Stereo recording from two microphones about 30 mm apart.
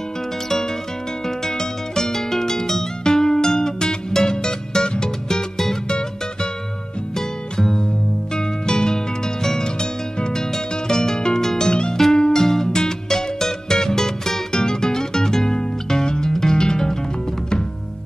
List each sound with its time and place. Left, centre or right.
1.2 s music: centre; by 6.5 s left
7.2 s music: centre
11.4 s music: centre